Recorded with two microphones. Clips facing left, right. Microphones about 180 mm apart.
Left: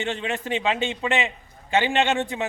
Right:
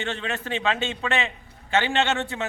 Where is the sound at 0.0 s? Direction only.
15° left (ahead or behind).